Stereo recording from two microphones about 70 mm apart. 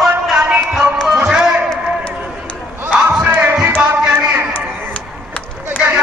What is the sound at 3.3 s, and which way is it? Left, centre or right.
Music, right.